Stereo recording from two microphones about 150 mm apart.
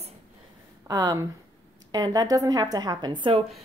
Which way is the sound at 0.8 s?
25° right (ahead or behind).